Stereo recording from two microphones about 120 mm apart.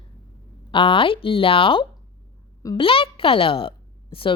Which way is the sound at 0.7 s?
45° left (ahead or behind).